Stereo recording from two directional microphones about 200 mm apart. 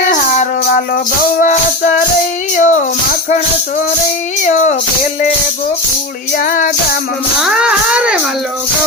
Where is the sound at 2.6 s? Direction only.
40° left (ahead or behind).